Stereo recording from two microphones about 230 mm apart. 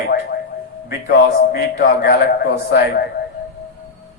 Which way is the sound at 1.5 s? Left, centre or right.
Left.